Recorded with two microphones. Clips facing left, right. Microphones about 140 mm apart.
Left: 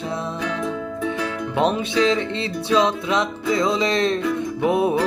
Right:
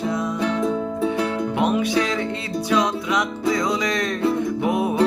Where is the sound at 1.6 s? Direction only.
25° left (ahead or behind).